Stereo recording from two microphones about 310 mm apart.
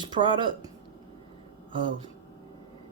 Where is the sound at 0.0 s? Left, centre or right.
Centre.